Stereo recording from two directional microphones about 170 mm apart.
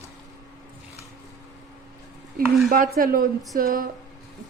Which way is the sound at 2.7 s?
55° right (ahead or behind).